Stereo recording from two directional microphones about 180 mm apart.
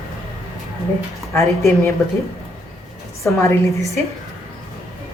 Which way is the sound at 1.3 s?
15° left (ahead or behind).